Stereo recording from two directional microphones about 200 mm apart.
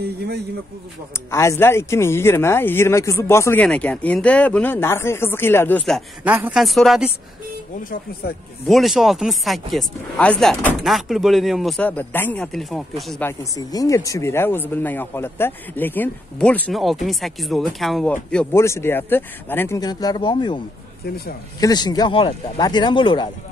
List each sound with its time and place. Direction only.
1.3 s speech: 15° left (ahead or behind)
8.6 s speech: centre (ahead or behind)
13.4 s speech: 20° left (ahead or behind)